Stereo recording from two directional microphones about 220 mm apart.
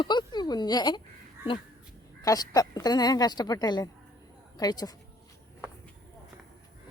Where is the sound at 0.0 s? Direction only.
20° left (ahead or behind).